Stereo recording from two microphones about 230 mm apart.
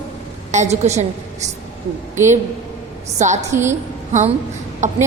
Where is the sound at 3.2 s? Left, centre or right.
Right.